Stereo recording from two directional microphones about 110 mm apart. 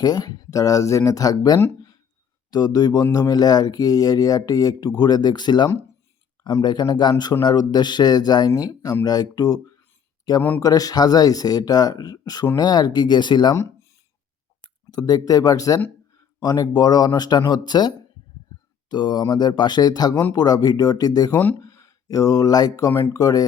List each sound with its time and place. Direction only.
0.0 s speech: 35° left (ahead or behind)
14.6 s speech: 35° left (ahead or behind)
22.9 s speech: 20° left (ahead or behind)
23.1 s speech: 35° left (ahead or behind)